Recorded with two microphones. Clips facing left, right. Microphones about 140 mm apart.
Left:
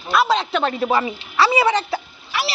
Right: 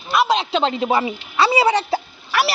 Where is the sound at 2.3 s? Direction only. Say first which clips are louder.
Right 5 dB; 55° right (ahead or behind).